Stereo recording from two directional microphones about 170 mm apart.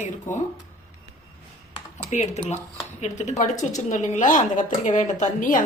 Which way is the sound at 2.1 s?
40° left (ahead or behind).